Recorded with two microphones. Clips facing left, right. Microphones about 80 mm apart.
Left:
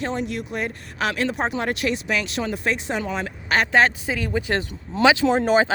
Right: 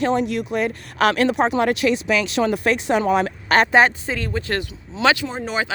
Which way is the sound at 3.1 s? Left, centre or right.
Right.